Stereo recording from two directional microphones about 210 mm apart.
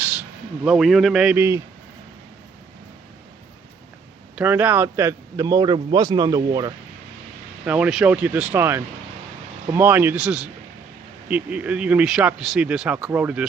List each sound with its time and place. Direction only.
0.6 s speech: centre (ahead or behind)
4.4 s a man's voice: 10° right (ahead or behind)
7.6 s a man's voice: 5° right (ahead or behind)